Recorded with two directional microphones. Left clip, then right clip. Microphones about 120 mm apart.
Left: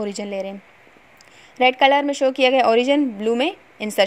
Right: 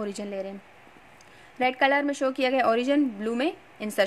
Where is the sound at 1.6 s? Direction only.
30° left (ahead or behind).